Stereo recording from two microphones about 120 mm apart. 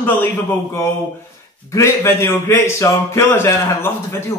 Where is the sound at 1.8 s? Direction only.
20° left (ahead or behind).